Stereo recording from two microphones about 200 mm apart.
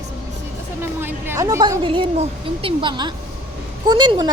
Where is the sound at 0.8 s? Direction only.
10° right (ahead or behind).